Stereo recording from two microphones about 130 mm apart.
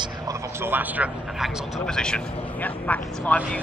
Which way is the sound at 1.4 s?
5° left (ahead or behind).